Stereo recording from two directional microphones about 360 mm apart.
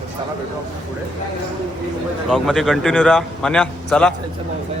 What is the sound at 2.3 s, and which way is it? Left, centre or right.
A man's voice, centre.